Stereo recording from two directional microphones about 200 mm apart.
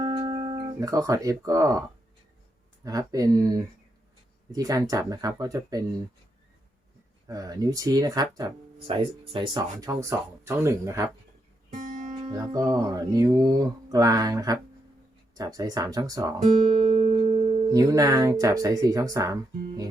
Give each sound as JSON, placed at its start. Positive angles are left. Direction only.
{"t": 0.0, "sound": "music", "side_deg": -25}
{"t": 2.8, "sound": "music", "side_deg": -15}
{"t": 7.3, "sound": "speech", "side_deg": -20}
{"t": 9.0, "sound": "music", "side_deg": -25}
{"t": 11.7, "sound": "music", "side_deg": -40}
{"t": 12.1, "sound": "music", "side_deg": -20}
{"t": 16.9, "sound": "music", "side_deg": -30}
{"t": 17.7, "sound": "music", "side_deg": -20}